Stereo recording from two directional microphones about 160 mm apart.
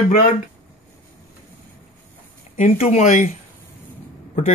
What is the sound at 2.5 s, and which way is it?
Speech, 45° left (ahead or behind).